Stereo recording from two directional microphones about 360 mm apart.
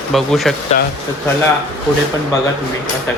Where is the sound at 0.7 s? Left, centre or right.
Left.